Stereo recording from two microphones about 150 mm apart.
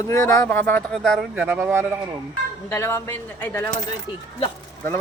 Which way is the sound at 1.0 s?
5° right (ahead or behind).